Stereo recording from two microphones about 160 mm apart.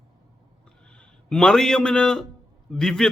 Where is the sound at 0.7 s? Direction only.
5° left (ahead or behind).